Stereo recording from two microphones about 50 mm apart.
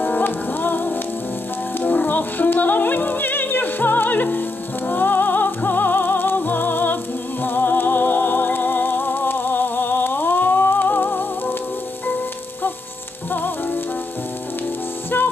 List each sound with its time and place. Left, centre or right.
0.0 s music: left
13.3 s frying: left
15.1 s music: left